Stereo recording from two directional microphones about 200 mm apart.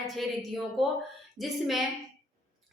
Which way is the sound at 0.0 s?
Centre (ahead or behind).